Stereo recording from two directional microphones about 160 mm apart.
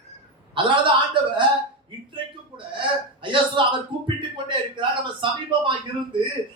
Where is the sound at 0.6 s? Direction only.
30° right (ahead or behind).